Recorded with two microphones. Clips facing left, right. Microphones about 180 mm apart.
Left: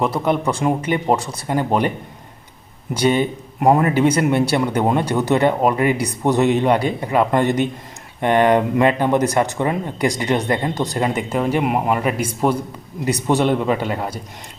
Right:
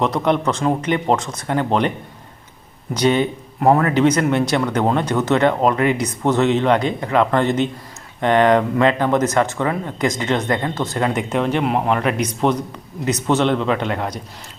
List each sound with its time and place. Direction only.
0.0 s speech: 5° left (ahead or behind)
2.9 s speech: 10° left (ahead or behind)